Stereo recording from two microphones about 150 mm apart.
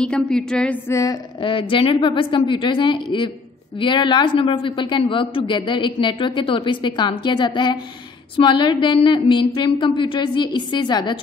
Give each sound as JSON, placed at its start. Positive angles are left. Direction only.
{"t": 0.0, "sound": "a sound", "side_deg": 5}
{"t": 0.8, "sound": "a woman's voice", "side_deg": 20}
{"t": 1.4, "sound": "a man's voice", "side_deg": 35}